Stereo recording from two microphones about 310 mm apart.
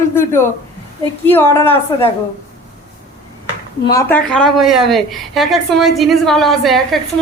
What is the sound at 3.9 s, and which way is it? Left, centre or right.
A woman's voice, centre.